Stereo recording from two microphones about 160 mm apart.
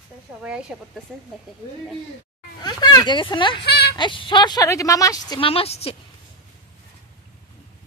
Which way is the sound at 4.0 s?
30° left (ahead or behind).